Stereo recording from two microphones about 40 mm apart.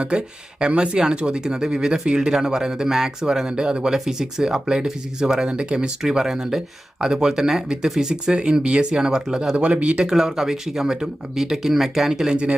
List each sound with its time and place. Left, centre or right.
0.0 s speech: right
9.6 s speech: right
10.1 s speech: centre